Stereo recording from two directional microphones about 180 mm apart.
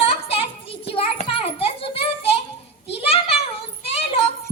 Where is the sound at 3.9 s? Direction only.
35° left (ahead or behind).